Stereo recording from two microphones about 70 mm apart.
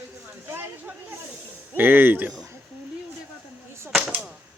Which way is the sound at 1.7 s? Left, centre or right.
Right.